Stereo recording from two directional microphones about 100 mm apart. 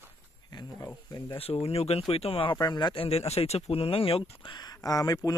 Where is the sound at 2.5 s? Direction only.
45° left (ahead or behind).